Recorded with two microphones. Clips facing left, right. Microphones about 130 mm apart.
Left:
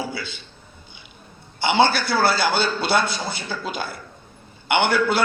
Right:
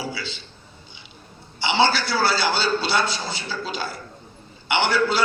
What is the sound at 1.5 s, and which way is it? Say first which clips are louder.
A man's voice: left 2 dB; 55° left (ahead or behind).